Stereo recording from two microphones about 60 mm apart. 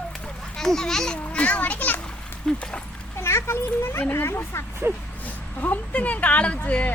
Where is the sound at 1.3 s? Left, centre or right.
Left.